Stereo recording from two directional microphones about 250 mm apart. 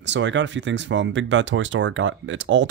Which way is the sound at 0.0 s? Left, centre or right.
Right.